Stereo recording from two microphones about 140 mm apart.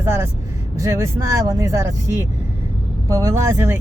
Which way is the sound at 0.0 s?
20° right (ahead or behind).